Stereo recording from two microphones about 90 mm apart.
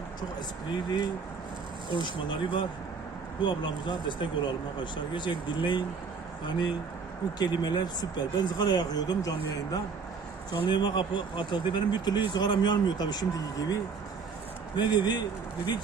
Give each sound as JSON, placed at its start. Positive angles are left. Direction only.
{"t": 0.9, "sound": "speech", "side_deg": 60}
{"t": 10.6, "sound": "speech", "side_deg": 55}
{"t": 14.8, "sound": "speech", "side_deg": 55}